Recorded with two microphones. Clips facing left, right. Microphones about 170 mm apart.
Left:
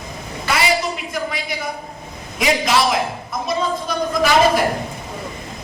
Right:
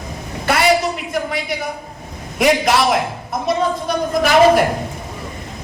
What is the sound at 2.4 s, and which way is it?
A man's voice, 60° right (ahead or behind).